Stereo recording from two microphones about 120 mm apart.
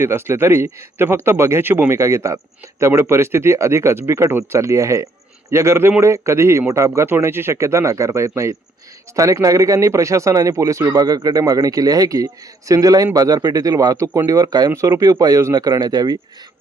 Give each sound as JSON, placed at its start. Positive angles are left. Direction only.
{"t": 0.0, "sound": "a man's voice", "side_deg": -20}